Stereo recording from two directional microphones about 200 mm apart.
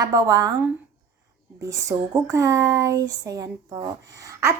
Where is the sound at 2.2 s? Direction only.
15° right (ahead or behind).